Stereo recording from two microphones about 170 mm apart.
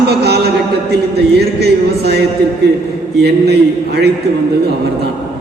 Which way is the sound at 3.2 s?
75° right (ahead or behind).